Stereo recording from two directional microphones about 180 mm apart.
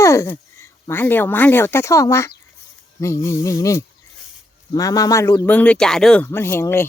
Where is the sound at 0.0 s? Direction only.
15° left (ahead or behind).